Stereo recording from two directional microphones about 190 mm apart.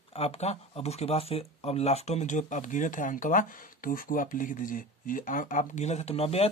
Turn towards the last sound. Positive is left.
turn(degrees=30)  # may be behind; listen again after turning